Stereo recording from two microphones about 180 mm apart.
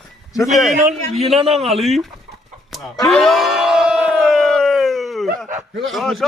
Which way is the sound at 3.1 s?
Centre (ahead or behind).